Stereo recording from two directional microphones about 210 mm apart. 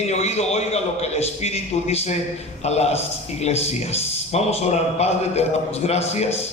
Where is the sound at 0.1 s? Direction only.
30° left (ahead or behind).